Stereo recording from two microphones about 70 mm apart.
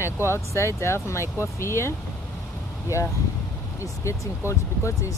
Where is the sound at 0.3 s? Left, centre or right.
Left.